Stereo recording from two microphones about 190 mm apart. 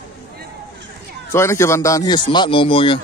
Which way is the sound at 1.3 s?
15° left (ahead or behind).